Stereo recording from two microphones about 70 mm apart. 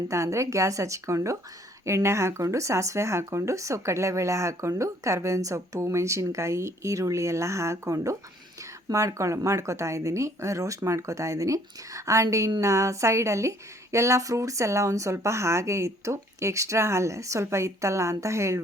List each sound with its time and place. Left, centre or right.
0.1 s speech: right